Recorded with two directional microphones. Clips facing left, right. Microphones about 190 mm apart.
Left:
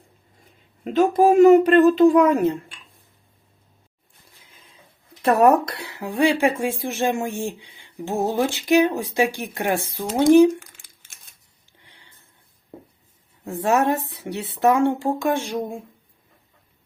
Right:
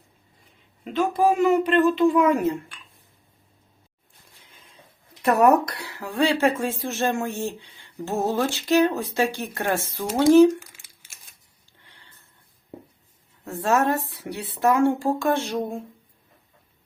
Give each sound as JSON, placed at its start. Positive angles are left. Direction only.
{"t": 0.9, "sound": "speech", "side_deg": 45}
{"t": 4.5, "sound": "printer", "side_deg": 0}
{"t": 5.2, "sound": "speech", "side_deg": 30}
{"t": 10.5, "sound": "a sound", "side_deg": -10}
{"t": 11.8, "sound": "a sound", "side_deg": 15}
{"t": 13.4, "sound": "speech", "side_deg": 15}